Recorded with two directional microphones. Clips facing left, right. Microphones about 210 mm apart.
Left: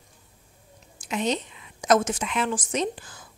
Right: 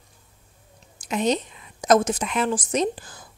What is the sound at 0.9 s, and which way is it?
A woman's voice, 40° right (ahead or behind).